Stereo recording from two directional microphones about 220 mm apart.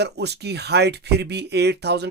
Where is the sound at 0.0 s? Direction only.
50° right (ahead or behind).